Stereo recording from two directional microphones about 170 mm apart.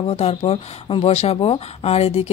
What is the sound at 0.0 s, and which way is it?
Speech, 35° left (ahead or behind).